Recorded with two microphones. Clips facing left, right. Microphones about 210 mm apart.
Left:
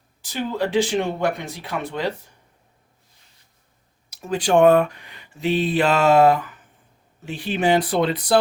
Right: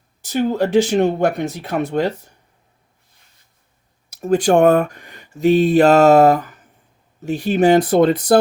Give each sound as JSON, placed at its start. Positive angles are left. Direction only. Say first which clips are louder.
{"t": 0.2, "sound": "speech", "louder": "right 6 dB", "side_deg": -45}
{"t": 4.1, "sound": "speech", "louder": "right 5 dB", "side_deg": -45}